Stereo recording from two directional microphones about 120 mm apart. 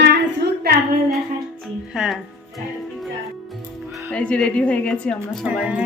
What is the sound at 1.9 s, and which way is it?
Music, 5° right (ahead or behind).